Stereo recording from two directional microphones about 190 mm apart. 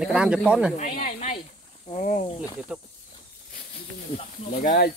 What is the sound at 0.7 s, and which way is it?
Speech, 45° left (ahead or behind).